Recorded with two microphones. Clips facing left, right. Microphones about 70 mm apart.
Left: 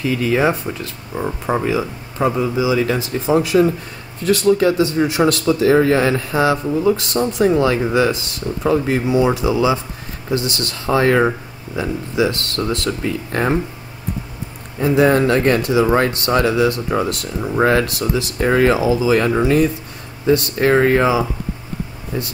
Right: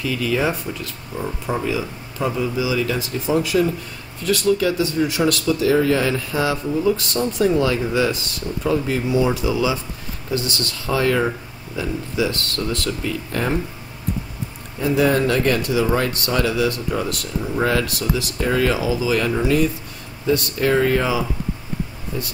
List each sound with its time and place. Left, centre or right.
0.0 s speech: left
6.7 s speech: centre
14.8 s speech: left